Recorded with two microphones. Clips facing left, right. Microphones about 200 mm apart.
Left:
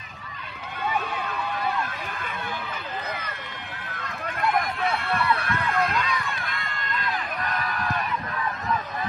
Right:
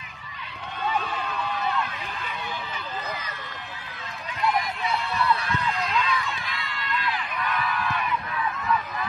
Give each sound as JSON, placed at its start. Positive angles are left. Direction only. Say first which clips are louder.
{"t": 4.3, "sound": "run", "louder": "left 1 dB", "side_deg": 55}